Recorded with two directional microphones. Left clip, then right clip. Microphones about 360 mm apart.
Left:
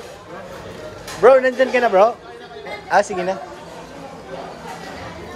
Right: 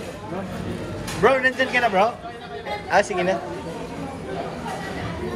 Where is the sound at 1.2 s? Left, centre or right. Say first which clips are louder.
Left 6 dB; centre.